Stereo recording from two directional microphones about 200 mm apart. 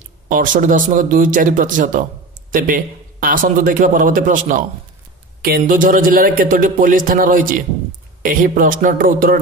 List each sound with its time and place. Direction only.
0.3 s a man's voice: 40° right (ahead or behind)